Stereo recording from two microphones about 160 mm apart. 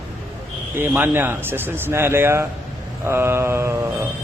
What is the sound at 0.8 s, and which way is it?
A man's voice, 15° right (ahead or behind).